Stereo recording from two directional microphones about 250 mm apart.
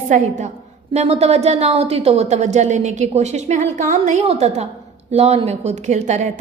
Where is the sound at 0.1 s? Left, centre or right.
Right.